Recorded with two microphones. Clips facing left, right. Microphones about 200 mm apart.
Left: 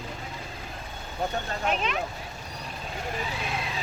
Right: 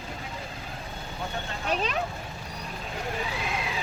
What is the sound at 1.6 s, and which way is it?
Speech, 35° right (ahead or behind).